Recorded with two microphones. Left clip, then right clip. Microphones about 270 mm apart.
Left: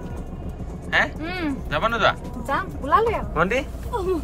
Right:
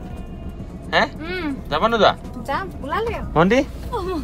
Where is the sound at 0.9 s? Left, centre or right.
Centre.